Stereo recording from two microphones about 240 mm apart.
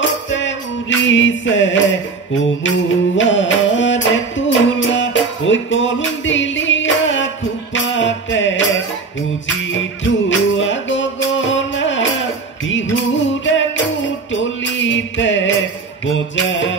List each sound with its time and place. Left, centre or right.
0.3 s music: left